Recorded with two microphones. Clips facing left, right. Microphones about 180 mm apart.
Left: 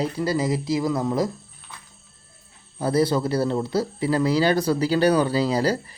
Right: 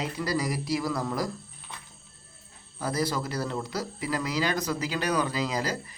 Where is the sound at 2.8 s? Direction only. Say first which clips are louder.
Left 8 dB; 30° left (ahead or behind).